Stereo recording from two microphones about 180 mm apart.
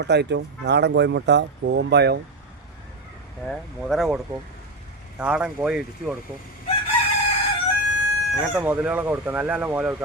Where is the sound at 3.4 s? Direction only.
Centre (ahead or behind).